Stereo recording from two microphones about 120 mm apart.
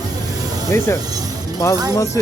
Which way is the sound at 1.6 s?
25° left (ahead or behind).